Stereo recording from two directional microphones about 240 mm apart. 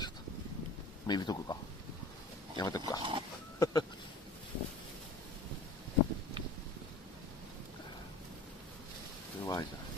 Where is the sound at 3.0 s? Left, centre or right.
Right.